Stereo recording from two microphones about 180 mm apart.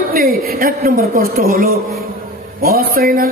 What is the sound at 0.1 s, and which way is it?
Speech, 55° right (ahead or behind).